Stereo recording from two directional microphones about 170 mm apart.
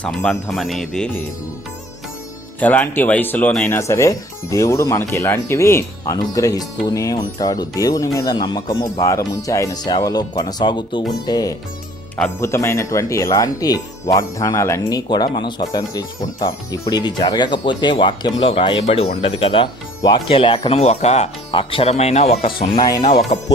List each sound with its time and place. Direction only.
0.0 s speech: 5° left (ahead or behind)
2.6 s speech: 10° left (ahead or behind)
12.1 s speech: 10° left (ahead or behind); by 22.5 s 35° left (ahead or behind)
22.7 s speech: 25° left (ahead or behind)
23.3 s speech: 40° left (ahead or behind)